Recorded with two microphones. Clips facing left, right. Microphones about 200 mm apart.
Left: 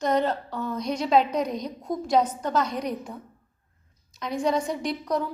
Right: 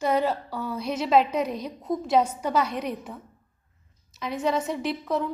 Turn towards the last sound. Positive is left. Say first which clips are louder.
# even
turn(degrees=-5)  # may be behind; listen again after turning